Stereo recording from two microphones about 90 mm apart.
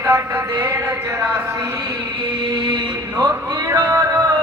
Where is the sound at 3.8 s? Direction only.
35° right (ahead or behind).